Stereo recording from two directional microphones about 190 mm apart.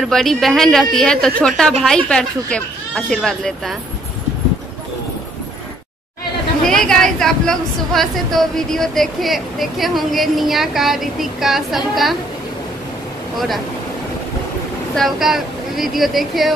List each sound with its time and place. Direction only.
0.0 s a woman's voice: centre (ahead or behind)
6.6 s a woman's voice: 5° left (ahead or behind)
15.0 s a woman's voice: centre (ahead or behind)